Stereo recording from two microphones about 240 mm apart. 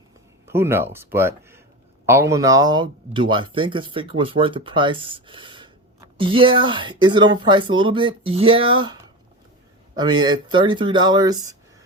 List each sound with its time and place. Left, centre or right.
0.4 s speech: centre